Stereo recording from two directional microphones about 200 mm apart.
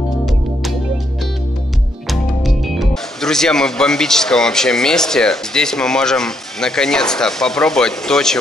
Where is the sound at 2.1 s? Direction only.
Centre (ahead or behind).